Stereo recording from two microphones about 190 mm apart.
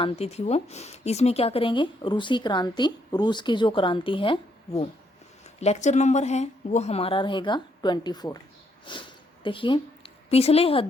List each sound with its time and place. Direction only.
0.0 s speech: 35° left (ahead or behind)